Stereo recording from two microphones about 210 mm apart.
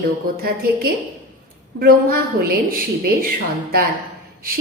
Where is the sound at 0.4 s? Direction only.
45° right (ahead or behind).